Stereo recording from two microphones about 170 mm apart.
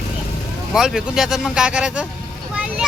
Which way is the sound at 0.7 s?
5° right (ahead or behind).